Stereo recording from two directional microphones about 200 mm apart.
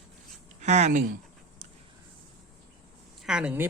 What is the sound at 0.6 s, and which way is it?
Speech, 35° right (ahead or behind).